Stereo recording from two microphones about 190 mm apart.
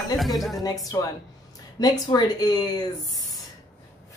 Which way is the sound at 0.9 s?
15° left (ahead or behind).